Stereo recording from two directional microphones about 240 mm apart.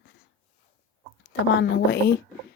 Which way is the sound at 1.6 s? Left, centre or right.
Left.